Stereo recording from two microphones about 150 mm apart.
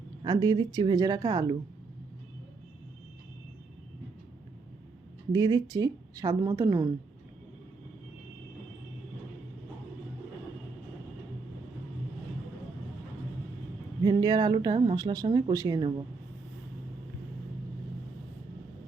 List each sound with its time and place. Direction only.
0.3 s speech: 25° right (ahead or behind)
5.3 s speech: 30° right (ahead or behind)
14.0 s speech: 30° right (ahead or behind)